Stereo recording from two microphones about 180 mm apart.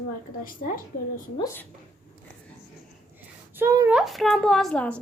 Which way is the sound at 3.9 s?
Centre (ahead or behind).